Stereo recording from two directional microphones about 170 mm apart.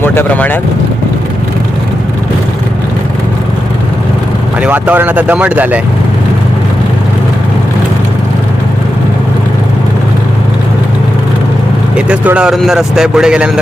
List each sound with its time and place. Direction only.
0.0 s speech: 10° left (ahead or behind)
4.6 s speech: 10° right (ahead or behind)
11.9 s speech: 5° right (ahead or behind)